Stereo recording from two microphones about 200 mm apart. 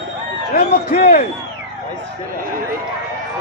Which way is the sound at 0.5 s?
50° left (ahead or behind).